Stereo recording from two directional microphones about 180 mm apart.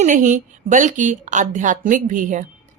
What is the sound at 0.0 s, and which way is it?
A woman's voice, 45° right (ahead or behind).